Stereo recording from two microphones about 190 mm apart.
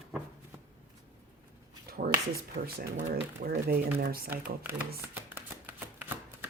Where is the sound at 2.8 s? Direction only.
50° right (ahead or behind).